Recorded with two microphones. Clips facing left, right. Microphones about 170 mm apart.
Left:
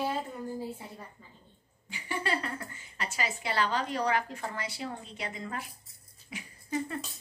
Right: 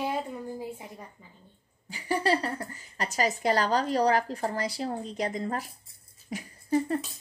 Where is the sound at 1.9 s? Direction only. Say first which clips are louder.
Right 7 dB; 40° right (ahead or behind).